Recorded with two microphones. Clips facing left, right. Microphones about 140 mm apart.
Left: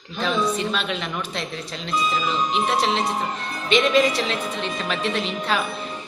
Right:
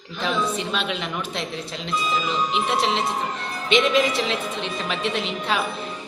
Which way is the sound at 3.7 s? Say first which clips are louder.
Left 1 dB; 20° right (ahead or behind).